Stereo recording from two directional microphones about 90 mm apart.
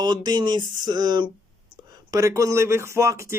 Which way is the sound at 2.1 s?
35° right (ahead or behind).